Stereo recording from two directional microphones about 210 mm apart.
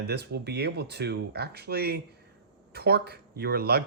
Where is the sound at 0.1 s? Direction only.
50° right (ahead or behind).